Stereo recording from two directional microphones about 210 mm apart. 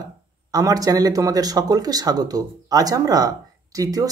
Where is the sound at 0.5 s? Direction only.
15° right (ahead or behind).